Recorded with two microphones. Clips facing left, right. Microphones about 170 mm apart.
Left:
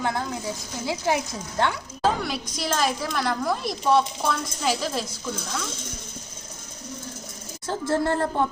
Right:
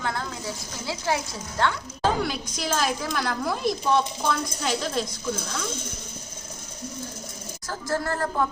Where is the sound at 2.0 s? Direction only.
Centre (ahead or behind).